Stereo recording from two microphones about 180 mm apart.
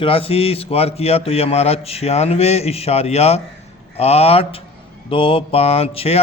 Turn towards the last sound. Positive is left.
turn(degrees=35)  # may be behind; listen again after turning